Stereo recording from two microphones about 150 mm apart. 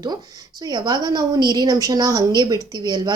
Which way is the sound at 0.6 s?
25° right (ahead or behind).